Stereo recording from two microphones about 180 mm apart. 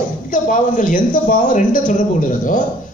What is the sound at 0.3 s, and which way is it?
A man's voice, 45° left (ahead or behind).